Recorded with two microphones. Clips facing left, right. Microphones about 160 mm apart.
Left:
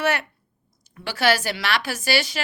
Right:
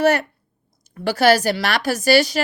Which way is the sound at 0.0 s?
40° right (ahead or behind).